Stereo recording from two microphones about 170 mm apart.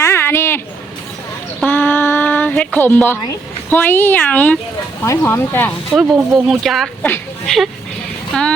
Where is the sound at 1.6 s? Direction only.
10° left (ahead or behind).